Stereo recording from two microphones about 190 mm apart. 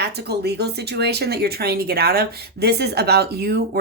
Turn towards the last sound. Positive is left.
turn(degrees=-60)  # may be behind; listen again after turning